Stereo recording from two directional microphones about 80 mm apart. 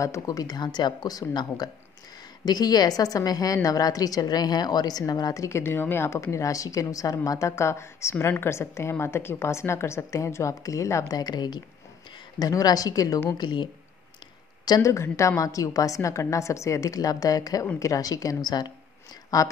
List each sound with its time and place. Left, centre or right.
0.0 s a woman's voice: left
5.6 s a woman's voice: left
11.1 s a woman's voice: left
14.6 s a sound: left
14.9 s a woman's voice: left
19.3 s a woman's voice: left